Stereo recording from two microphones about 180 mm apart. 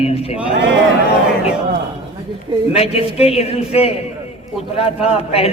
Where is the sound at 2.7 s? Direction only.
35° left (ahead or behind).